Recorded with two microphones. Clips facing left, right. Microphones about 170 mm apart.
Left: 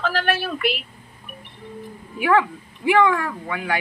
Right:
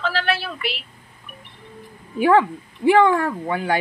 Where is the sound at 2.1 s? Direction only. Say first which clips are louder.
Right 3 dB; 30° right (ahead or behind).